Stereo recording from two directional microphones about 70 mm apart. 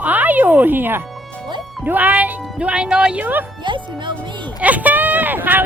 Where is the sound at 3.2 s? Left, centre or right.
Right.